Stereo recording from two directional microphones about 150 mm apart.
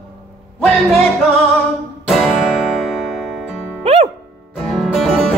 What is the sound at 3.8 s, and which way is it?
Music, 40° right (ahead or behind).